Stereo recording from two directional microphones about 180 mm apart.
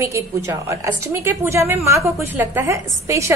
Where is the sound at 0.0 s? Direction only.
15° right (ahead or behind).